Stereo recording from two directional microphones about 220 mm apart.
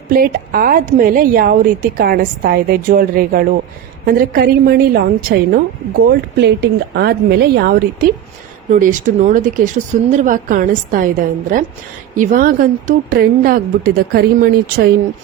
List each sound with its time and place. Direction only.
0.1 s a woman's voice: 40° right (ahead or behind)
8.7 s a woman's voice: 35° right (ahead or behind)
12.1 s a woman's voice: 35° right (ahead or behind)